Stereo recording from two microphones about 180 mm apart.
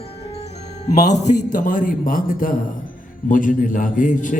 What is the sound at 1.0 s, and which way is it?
A man's voice, 40° left (ahead or behind).